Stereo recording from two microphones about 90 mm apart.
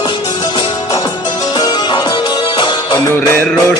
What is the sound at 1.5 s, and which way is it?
Music, 55° left (ahead or behind).